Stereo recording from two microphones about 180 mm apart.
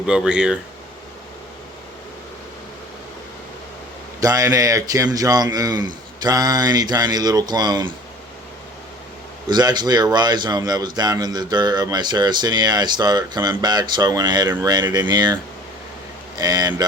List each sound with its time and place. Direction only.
0.1 s speech: 5° right (ahead or behind)
4.2 s speech: 20° right (ahead or behind)
9.5 s speech: 25° right (ahead or behind)
16.4 s speech: 20° right (ahead or behind)